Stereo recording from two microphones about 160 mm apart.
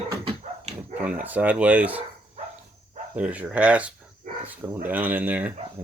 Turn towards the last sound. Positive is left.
turn(degrees=-10)  # may be behind; listen again after turning